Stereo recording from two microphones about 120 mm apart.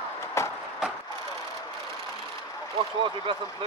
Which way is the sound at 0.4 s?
25° left (ahead or behind).